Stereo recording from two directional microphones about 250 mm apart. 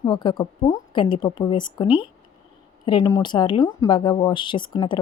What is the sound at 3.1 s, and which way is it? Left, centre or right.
A woman's voice, centre.